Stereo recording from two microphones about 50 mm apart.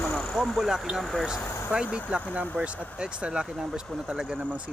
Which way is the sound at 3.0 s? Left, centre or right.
Centre.